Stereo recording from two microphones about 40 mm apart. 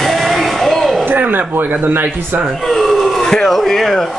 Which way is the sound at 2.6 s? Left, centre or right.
Centre.